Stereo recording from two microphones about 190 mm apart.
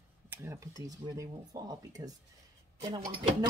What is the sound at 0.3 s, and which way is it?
Speech, 15° right (ahead or behind).